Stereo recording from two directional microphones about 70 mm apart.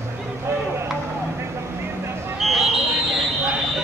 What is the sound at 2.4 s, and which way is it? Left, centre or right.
Fire alarm, centre.